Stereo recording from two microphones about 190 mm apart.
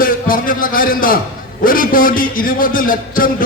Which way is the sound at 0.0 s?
50° left (ahead or behind).